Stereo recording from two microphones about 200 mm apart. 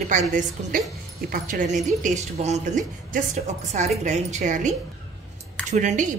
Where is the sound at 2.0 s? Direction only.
35° right (ahead or behind).